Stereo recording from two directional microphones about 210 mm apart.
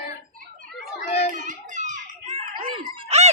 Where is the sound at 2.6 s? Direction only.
25° right (ahead or behind).